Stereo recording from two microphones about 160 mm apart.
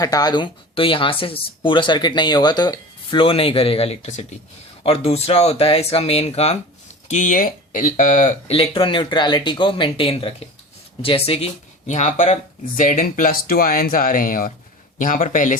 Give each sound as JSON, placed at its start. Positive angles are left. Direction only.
{"t": 0.0, "sound": "speech", "side_deg": 25}
{"t": 8.5, "sound": "speech", "side_deg": 35}